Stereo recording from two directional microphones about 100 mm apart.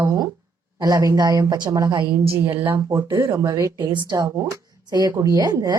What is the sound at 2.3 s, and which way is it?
A woman's voice, 25° right (ahead or behind).